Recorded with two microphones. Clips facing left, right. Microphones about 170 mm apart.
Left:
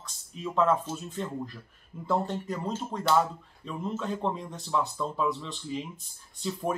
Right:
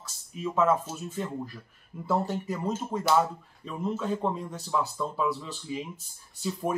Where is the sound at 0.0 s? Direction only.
5° right (ahead or behind).